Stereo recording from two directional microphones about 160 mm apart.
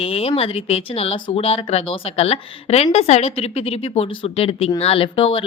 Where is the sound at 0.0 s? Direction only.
35° left (ahead or behind).